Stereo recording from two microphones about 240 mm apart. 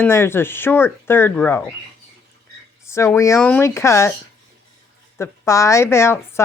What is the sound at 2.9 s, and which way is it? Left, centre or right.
A woman's voice, centre.